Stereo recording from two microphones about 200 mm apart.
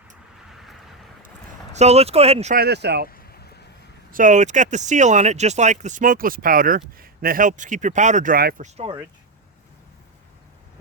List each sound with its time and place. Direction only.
0.5 s vehicle: centre (ahead or behind)
1.7 s speech: 35° right (ahead or behind)
2.6 s speech: 55° right (ahead or behind)
3.1 s a sound: 50° left (ahead or behind)
4.1 s speech: 40° right (ahead or behind)
8.6 s speech: 30° right (ahead or behind)